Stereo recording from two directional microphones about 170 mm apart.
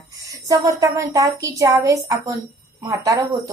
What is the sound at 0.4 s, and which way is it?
A woman's voice, 20° right (ahead or behind).